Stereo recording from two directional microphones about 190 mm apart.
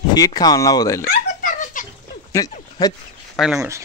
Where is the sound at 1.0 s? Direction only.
40° left (ahead or behind).